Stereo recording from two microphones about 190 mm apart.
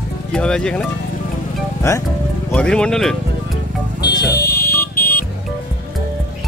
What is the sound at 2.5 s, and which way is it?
Speech, 5° left (ahead or behind).